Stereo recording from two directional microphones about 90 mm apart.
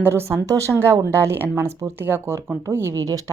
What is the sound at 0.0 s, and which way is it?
A woman's voice, 25° right (ahead or behind).